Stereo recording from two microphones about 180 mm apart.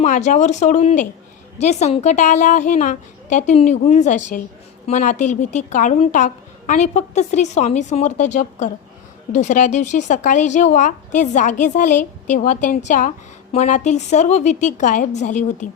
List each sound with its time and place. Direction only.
0.0 s speech: 40° left (ahead or behind)